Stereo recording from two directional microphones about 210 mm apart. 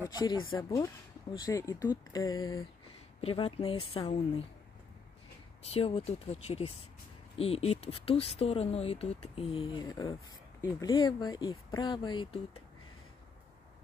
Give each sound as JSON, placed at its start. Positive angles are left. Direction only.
{"t": 0.5, "sound": "speech", "side_deg": 20}
{"t": 3.2, "sound": "speech", "side_deg": 25}
{"t": 5.6, "sound": "speech", "side_deg": 30}